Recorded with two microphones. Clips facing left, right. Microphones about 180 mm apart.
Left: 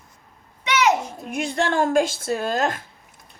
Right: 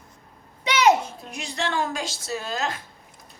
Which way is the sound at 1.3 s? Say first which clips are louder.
Left 8 dB; 50° left (ahead or behind).